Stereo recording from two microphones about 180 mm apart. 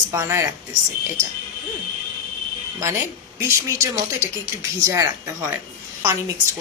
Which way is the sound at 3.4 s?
15° right (ahead or behind).